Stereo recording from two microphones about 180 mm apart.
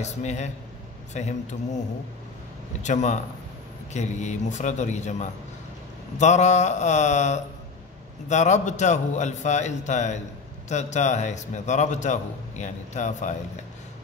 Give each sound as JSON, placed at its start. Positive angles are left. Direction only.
{"t": 0.0, "sound": "a man's voice", "side_deg": 40}
{"t": 2.8, "sound": "a man's voice", "side_deg": 40}